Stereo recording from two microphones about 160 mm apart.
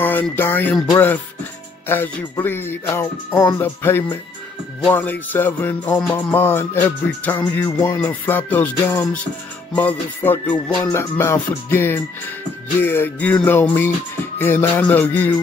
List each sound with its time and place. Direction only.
0.0 s music: 10° left (ahead or behind)